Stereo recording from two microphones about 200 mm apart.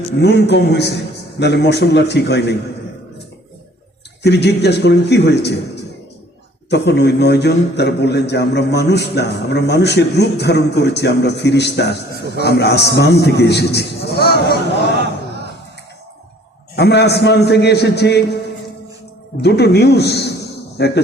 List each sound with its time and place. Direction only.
0.2 s a man's voice: 55° left (ahead or behind)
4.2 s a man's voice: 55° left (ahead or behind)
16.7 s a man's voice: 55° left (ahead or behind)
19.4 s a man's voice: 55° left (ahead or behind)